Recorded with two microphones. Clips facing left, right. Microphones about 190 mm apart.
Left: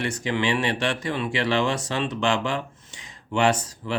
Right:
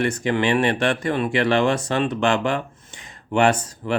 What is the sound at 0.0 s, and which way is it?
Speech, 55° right (ahead or behind).